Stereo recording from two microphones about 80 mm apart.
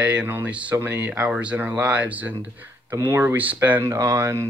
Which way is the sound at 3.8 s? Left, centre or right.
Right.